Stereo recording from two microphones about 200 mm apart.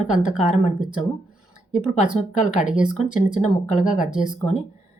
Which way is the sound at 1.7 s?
40° left (ahead or behind).